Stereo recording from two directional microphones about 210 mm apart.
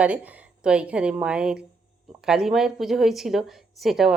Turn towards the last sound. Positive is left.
turn(degrees=0)  # may be behind; listen again after turning